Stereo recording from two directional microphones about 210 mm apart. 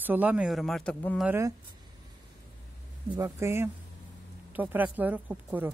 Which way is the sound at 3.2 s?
10° right (ahead or behind).